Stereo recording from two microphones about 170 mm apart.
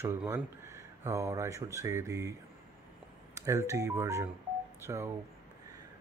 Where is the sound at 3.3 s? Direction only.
15° right (ahead or behind).